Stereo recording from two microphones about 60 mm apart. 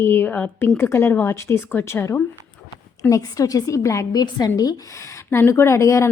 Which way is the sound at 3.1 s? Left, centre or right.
Left.